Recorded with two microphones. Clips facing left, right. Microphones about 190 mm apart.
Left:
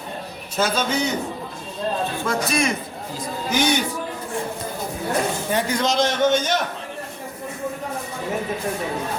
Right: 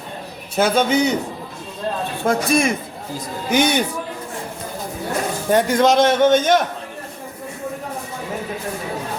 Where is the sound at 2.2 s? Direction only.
55° right (ahead or behind).